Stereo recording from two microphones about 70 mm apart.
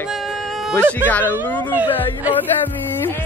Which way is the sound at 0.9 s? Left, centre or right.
Left.